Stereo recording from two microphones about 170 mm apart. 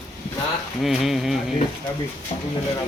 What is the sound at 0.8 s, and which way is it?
Speech, centre (ahead or behind).